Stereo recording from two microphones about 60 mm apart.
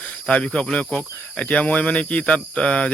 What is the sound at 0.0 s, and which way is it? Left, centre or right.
Speech, left.